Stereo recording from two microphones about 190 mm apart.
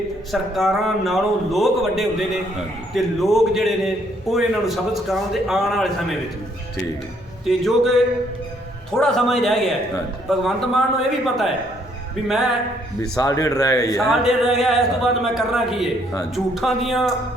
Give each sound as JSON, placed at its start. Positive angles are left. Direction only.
{"t": 0.3, "sound": "a man's voice", "side_deg": 0}
{"t": 7.4, "sound": "a man's voice", "side_deg": 0}
{"t": 12.3, "sound": "a man's voice", "side_deg": 0}
{"t": 13.0, "sound": "a man's voice", "side_deg": 15}
{"t": 14.0, "sound": "a man's voice", "side_deg": 0}